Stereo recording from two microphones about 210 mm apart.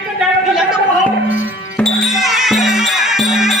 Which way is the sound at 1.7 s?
Centre (ahead or behind).